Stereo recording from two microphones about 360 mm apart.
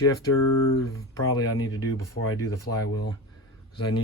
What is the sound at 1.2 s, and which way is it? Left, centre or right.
Speech, left.